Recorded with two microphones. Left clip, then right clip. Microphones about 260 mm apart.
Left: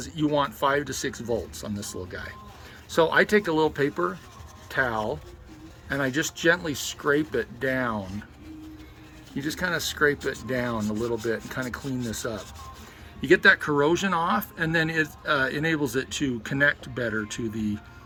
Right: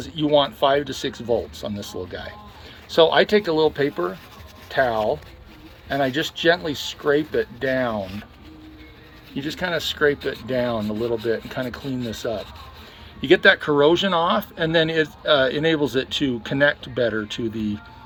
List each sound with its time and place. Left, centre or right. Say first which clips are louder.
0.0 s speech: right 6 dB; centre
9.3 s speech: right 3 dB; left